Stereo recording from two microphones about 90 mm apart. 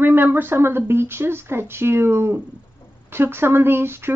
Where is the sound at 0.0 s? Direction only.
20° right (ahead or behind).